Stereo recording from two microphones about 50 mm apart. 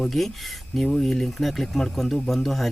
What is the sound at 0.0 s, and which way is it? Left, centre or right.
Speech, centre.